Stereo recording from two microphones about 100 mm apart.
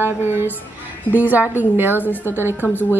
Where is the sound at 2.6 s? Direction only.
20° left (ahead or behind).